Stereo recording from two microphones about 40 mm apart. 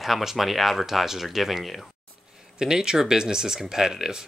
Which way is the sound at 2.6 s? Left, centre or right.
Centre.